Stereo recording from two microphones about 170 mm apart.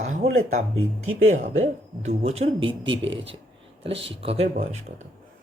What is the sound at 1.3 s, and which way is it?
Speech, 45° right (ahead or behind).